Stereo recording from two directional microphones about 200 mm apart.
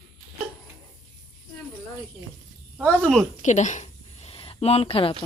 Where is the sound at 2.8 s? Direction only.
5° left (ahead or behind).